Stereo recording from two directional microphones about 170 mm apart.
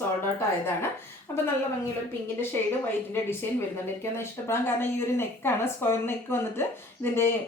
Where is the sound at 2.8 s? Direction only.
15° left (ahead or behind).